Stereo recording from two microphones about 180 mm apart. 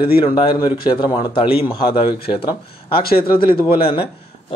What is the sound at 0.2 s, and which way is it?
Speech, 25° left (ahead or behind).